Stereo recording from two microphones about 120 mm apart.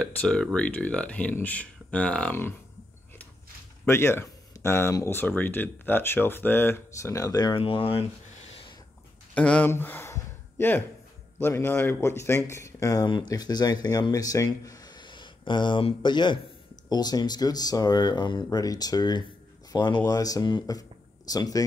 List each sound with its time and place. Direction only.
0.0 s speech: 5° left (ahead or behind)
3.8 s speech: 20° left (ahead or behind)
7.5 s speech: 50° left (ahead or behind)
9.3 s speech: 10° left (ahead or behind)
9.7 s a sound: 20° left (ahead or behind)
11.3 s speech: 20° left (ahead or behind)